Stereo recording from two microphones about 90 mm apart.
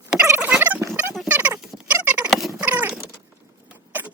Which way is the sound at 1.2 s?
20° right (ahead or behind).